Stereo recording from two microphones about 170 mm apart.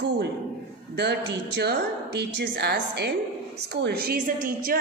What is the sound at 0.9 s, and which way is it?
A woman's voice, 75° right (ahead or behind).